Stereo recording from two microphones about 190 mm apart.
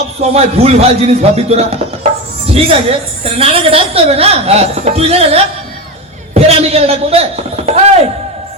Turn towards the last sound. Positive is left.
turn(degrees=-35)  # may be behind; listen again after turning